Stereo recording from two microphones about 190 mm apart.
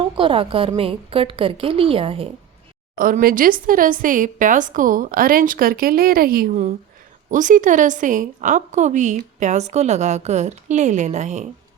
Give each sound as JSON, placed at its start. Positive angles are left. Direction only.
{"t": 0.0, "sound": "a woman's voice", "side_deg": -25}
{"t": 3.0, "sound": "a woman's voice", "side_deg": -50}